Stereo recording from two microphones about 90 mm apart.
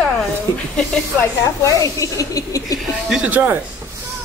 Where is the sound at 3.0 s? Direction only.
15° right (ahead or behind).